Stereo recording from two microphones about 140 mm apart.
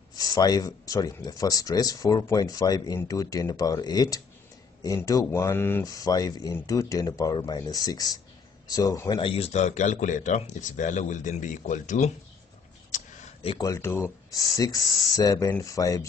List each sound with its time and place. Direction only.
0.1 s speech: 25° left (ahead or behind)
9.2 s speech: 45° left (ahead or behind); by 12.1 s 65° left (ahead or behind)
12.9 s a sound: 65° left (ahead or behind)
13.6 s speech: 20° left (ahead or behind)